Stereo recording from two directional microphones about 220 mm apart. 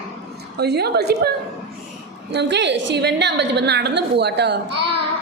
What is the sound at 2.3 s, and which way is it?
A woman's voice, 50° right (ahead or behind).